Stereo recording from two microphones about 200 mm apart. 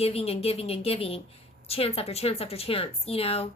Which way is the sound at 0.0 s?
30° left (ahead or behind).